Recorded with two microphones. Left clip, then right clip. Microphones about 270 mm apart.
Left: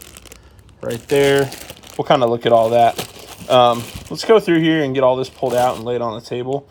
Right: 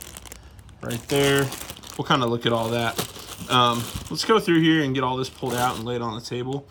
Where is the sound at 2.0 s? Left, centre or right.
Right.